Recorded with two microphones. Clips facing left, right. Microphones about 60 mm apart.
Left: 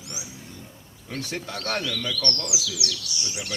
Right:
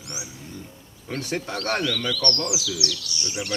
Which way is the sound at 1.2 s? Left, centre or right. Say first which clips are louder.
Right 3 dB; right.